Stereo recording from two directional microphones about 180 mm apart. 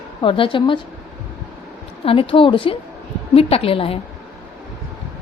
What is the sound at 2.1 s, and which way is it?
A woman's voice, 30° left (ahead or behind).